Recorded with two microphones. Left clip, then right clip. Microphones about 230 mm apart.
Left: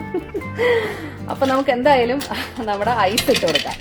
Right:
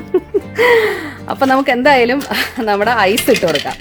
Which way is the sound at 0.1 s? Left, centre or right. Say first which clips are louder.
Right 10 dB; right.